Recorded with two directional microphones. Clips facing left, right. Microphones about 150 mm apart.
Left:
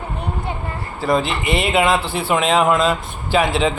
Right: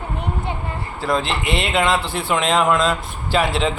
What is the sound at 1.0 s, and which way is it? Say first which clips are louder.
Speech: left 3 dB; centre (ahead or behind).